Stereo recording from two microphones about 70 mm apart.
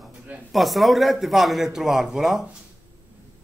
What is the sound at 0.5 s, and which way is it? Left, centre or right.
Speech, centre.